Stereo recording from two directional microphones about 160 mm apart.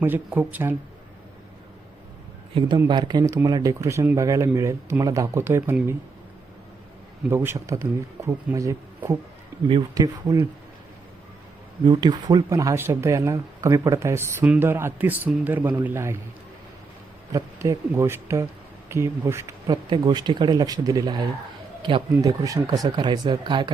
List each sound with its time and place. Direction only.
0.0 s speech: 10° right (ahead or behind)
2.6 s speech: 25° right (ahead or behind)
7.3 s speech: 15° right (ahead or behind)
11.9 s speech: 25° right (ahead or behind)
17.3 s speech: 20° right (ahead or behind)
19.6 s speech: 30° right (ahead or behind)
21.8 s a sound: 30° right (ahead or behind)
22.1 s speech: 20° right (ahead or behind)